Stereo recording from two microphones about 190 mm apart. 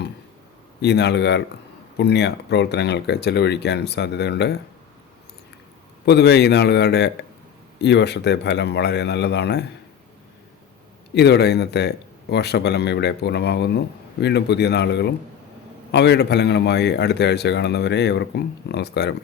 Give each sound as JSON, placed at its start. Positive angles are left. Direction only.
{"t": 0.8, "sound": "speech", "side_deg": 60}
{"t": 6.1, "sound": "speech", "side_deg": 60}
{"t": 11.1, "sound": "speech", "side_deg": 60}